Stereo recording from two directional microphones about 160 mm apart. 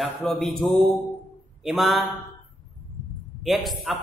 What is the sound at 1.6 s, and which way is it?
Speech, centre (ahead or behind).